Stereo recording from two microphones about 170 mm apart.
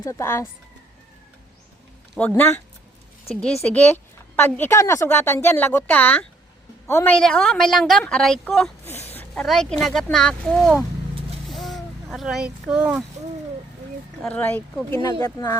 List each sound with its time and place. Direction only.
0.0 s a woman's voice: 15° left (ahead or behind)
2.1 s a woman's voice: 10° left (ahead or behind)
3.6 s a woman's voice: 10° left (ahead or behind)
11.4 s a sound: centre (ahead or behind)
14.2 s a woman's voice: 5° left (ahead or behind)